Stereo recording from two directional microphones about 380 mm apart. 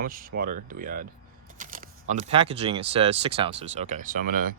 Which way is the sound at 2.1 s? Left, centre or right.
Centre.